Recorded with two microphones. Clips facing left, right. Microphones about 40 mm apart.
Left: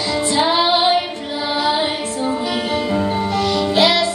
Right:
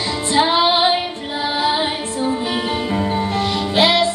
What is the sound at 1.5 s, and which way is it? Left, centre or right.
Music, right.